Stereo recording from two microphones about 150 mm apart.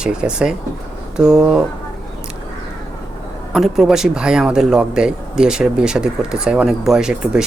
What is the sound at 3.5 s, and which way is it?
Speech, centre (ahead or behind).